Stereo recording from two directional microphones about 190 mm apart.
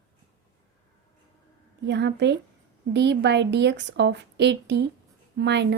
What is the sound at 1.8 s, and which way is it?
A woman's voice, 65° right (ahead or behind).